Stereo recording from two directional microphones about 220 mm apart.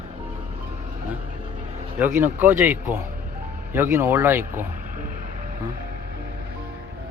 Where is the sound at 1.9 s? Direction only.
10° right (ahead or behind).